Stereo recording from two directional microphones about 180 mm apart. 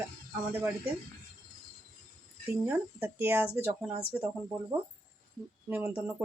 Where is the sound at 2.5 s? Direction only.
10° right (ahead or behind).